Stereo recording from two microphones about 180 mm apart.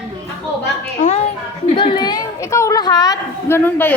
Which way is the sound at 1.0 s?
45° left (ahead or behind).